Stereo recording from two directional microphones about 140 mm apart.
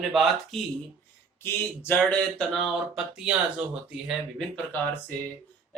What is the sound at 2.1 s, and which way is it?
Speech, 5° left (ahead or behind).